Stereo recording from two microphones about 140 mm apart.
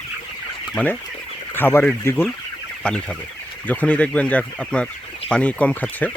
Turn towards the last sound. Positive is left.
turn(degrees=10)  # may be behind; listen again after turning